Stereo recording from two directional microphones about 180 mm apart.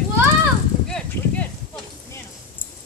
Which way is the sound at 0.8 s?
5° left (ahead or behind).